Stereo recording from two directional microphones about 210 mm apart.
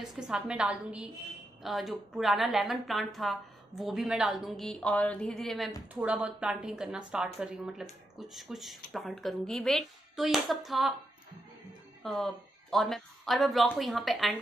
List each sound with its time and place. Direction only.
0.0 s a woman's voice: centre (ahead or behind)
12.0 s a woman's voice: centre (ahead or behind)